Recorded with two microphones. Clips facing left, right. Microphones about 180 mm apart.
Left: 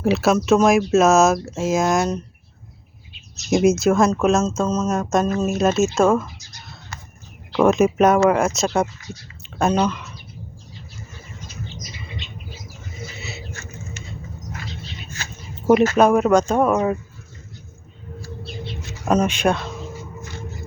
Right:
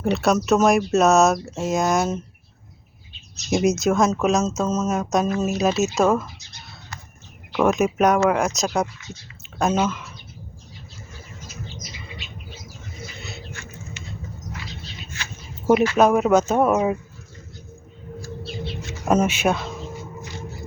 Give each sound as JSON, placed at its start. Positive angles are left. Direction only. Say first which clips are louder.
{"t": 0.0, "sound": "speech", "louder": "left 2 dB", "side_deg": 0}
{"t": 3.5, "sound": "speech", "louder": "left 3 dB", "side_deg": 0}
{"t": 7.6, "sound": "speech", "louder": "left 3 dB", "side_deg": 0}
{"t": 13.1, "sound": "a sound", "louder": "left 2 dB", "side_deg": 5}
{"t": 13.5, "sound": "a sound", "louder": "left 2 dB", "side_deg": 40}
{"t": 16.0, "sound": "speech", "louder": "left 1 dB", "side_deg": 0}
{"t": 18.6, "sound": "music", "louder": "even", "side_deg": -5}